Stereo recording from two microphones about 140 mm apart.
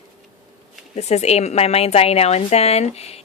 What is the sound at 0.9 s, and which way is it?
A woman's voice, 50° left (ahead or behind).